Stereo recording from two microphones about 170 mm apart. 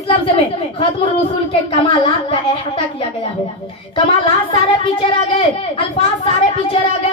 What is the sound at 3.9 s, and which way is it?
A child's voice, 35° left (ahead or behind).